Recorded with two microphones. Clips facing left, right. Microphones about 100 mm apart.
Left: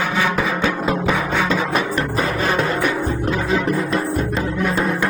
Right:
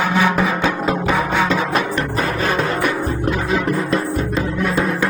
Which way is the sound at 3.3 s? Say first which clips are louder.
Right 1 dB; 35° left (ahead or behind).